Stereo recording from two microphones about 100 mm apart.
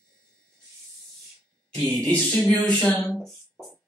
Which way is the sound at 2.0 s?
15° left (ahead or behind).